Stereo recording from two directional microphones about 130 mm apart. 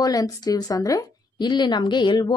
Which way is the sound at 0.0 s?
30° left (ahead or behind).